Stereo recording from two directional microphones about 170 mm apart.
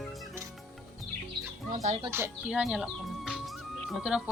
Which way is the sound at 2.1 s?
10° right (ahead or behind).